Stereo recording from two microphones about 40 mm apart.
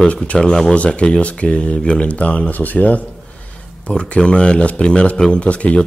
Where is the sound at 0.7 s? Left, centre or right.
Left.